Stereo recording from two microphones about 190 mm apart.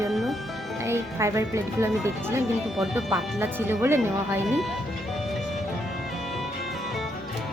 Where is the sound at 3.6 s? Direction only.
10° right (ahead or behind).